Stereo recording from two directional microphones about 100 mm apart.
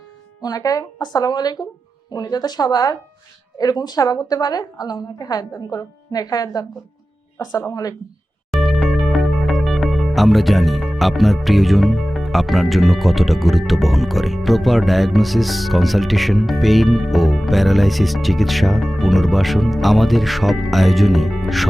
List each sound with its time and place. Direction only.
0.4 s a woman's voice: 40° left (ahead or behind)
8.4 s music: centre (ahead or behind)